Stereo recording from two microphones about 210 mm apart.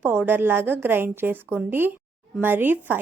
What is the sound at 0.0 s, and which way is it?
Speech, 10° right (ahead or behind).